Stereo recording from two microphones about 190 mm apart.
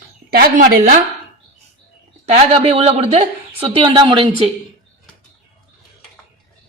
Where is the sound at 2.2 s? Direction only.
35° right (ahead or behind).